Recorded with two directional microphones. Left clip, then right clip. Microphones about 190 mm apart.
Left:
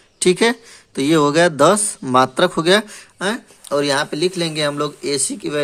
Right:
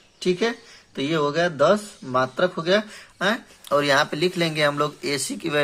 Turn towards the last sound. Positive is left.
turn(degrees=15)  # may be behind; listen again after turning